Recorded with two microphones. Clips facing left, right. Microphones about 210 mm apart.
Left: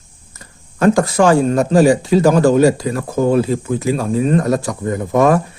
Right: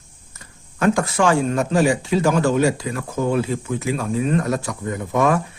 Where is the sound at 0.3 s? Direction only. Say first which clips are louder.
Left 5 dB; 35° left (ahead or behind).